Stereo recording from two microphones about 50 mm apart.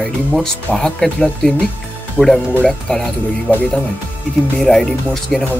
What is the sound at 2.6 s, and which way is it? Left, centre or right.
Speech, centre.